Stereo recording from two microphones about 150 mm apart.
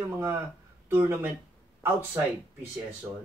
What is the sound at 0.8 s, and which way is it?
Speech, 15° right (ahead or behind).